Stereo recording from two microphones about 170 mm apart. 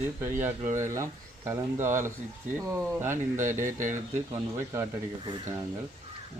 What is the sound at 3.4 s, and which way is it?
Speech, 50° right (ahead or behind).